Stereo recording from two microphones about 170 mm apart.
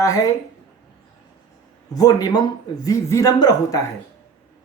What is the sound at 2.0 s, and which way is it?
Speech, 20° left (ahead or behind).